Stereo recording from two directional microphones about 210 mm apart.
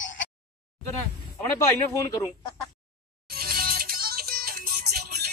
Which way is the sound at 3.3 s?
45° right (ahead or behind).